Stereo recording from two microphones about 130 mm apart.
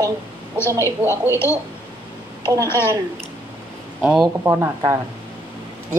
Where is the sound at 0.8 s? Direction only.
20° left (ahead or behind).